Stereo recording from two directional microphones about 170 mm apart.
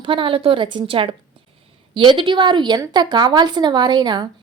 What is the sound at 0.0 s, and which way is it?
A woman's voice, 30° right (ahead or behind).